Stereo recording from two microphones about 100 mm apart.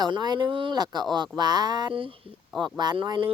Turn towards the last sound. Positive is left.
turn(degrees=-55)  # may be behind; listen again after turning